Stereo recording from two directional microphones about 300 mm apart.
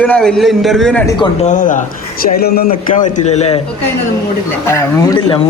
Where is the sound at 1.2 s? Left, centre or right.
Left.